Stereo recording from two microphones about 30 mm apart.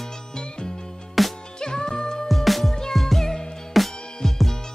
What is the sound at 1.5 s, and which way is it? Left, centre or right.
Music, left.